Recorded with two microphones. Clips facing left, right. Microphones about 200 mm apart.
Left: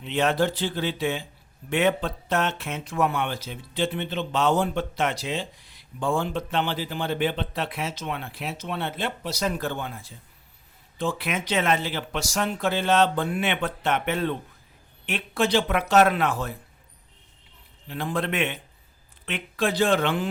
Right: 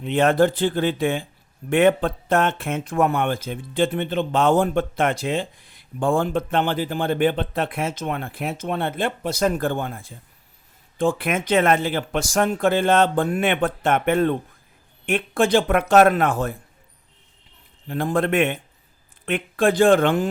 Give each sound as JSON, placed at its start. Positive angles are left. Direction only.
{"t": 0.0, "sound": "speech", "side_deg": -50}
{"t": 17.8, "sound": "speech", "side_deg": -50}